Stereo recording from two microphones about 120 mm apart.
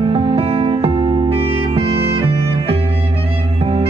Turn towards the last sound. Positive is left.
turn(degrees=-55)  # may be behind; listen again after turning